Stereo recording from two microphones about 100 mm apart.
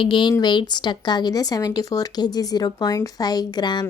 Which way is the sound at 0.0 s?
50° left (ahead or behind).